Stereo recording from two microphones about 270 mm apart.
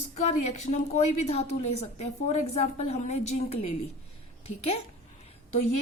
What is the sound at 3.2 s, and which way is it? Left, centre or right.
A woman's voice, left.